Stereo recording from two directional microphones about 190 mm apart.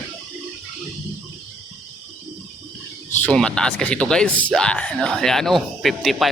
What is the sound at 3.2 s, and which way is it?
Speech, 5° left (ahead or behind).